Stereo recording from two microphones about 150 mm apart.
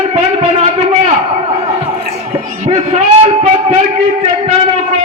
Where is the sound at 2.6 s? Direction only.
45° right (ahead or behind).